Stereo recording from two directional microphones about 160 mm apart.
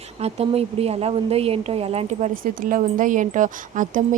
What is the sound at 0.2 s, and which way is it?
A woman's voice, 40° right (ahead or behind).